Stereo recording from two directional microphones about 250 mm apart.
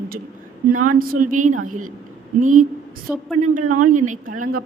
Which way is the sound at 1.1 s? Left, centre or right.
Right.